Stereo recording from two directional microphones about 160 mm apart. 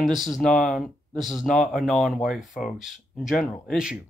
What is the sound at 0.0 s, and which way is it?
Speech, centre (ahead or behind).